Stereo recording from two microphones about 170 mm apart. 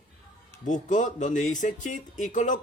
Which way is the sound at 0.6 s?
45° left (ahead or behind).